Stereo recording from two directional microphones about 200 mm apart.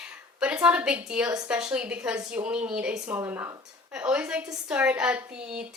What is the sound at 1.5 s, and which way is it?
A woman's voice, 5° right (ahead or behind).